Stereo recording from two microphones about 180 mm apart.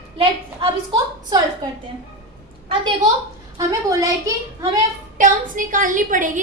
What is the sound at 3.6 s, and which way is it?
A woman's voice, 20° right (ahead or behind).